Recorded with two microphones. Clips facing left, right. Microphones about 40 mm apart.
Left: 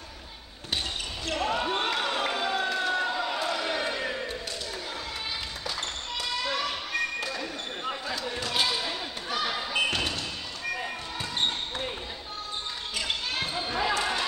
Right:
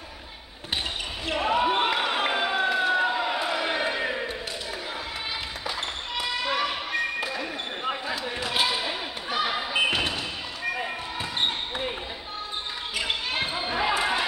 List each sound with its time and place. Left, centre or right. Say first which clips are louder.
1.2 s basketball bounce: right 5 dB; centre
6.1 s basketball bounce: right 4 dB; centre
12.9 s basketball bounce: right 3 dB; centre